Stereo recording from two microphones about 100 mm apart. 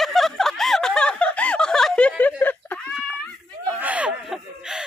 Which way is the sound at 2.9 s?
Centre (ahead or behind).